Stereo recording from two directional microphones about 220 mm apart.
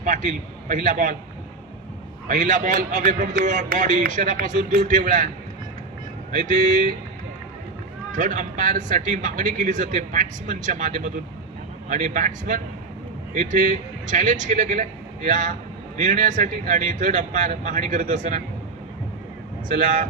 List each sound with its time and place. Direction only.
0.0 s a man's voice: 35° right (ahead or behind)
2.2 s a man's voice: 35° right (ahead or behind)
6.3 s a man's voice: 35° right (ahead or behind)
8.1 s a man's voice: 35° right (ahead or behind)
19.7 s a man's voice: 35° right (ahead or behind)